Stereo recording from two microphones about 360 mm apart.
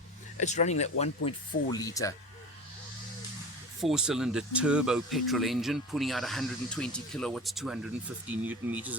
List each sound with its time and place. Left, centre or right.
0.3 s speech: centre
3.8 s speech: centre